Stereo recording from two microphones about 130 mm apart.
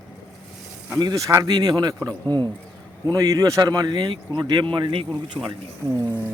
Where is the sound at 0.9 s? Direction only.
30° right (ahead or behind).